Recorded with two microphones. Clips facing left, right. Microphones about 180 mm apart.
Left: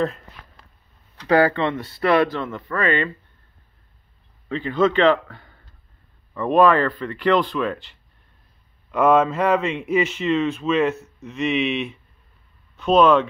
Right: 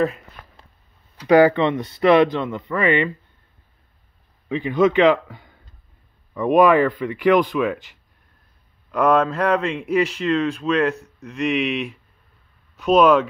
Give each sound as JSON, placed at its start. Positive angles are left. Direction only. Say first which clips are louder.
{"t": 1.2, "sound": "speech", "louder": "right 4 dB", "side_deg": -15}
{"t": 4.5, "sound": "speech", "louder": "right 2 dB", "side_deg": -15}
{"t": 8.9, "sound": "a man's voice", "louder": "left 1 dB", "side_deg": 5}